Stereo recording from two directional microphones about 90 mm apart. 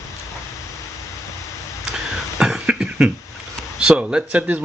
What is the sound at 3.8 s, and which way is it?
Speech, 10° right (ahead or behind).